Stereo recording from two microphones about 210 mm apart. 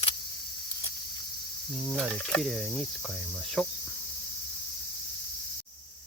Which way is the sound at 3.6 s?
5° left (ahead or behind).